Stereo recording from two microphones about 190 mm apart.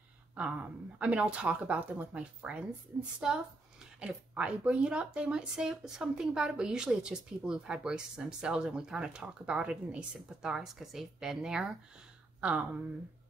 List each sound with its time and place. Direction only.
0.4 s speech: 5° right (ahead or behind)